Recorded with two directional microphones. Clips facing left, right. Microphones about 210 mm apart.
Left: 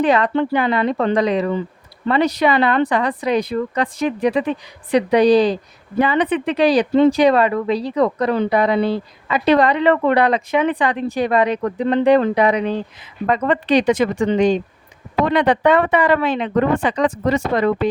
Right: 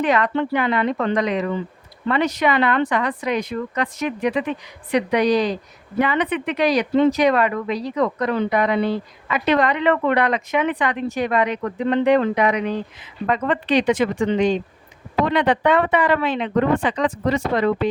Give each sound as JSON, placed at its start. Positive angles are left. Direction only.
{"t": 0.0, "sound": "speech", "side_deg": 30}